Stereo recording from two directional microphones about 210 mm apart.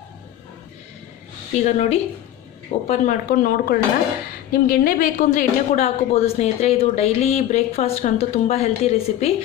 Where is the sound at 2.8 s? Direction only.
40° left (ahead or behind).